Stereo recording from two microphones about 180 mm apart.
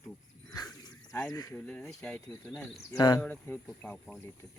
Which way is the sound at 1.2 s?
15° left (ahead or behind).